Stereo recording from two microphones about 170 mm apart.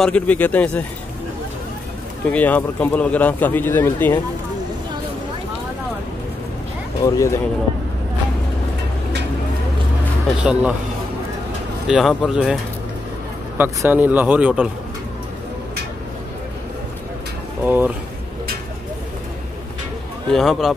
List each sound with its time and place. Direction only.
0.0 s speech: 10° left (ahead or behind)
2.2 s speech: 10° left (ahead or behind)
7.0 s speech: 20° left (ahead or behind)
10.4 s speech: 5° right (ahead or behind)
11.9 s speech: centre (ahead or behind)
13.6 s speech: 10° right (ahead or behind)
17.6 s speech: 10° right (ahead or behind)
20.3 s speech: centre (ahead or behind)